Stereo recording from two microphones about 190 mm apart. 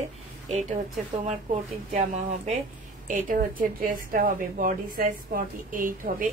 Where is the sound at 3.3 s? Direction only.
45° right (ahead or behind).